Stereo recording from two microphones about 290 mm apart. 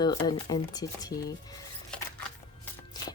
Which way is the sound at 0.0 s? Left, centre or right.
Centre.